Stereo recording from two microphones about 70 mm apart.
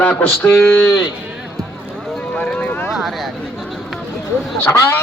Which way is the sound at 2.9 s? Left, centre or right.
Centre.